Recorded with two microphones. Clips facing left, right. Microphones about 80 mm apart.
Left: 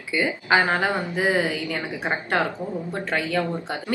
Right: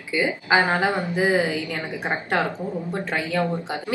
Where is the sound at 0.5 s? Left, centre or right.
Centre.